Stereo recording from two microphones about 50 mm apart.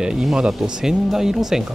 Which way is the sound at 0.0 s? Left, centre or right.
Centre.